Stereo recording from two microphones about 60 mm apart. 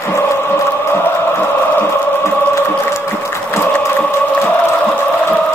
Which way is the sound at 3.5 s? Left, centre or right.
Left.